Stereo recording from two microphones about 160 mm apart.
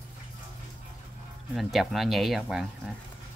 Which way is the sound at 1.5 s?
Centre (ahead or behind).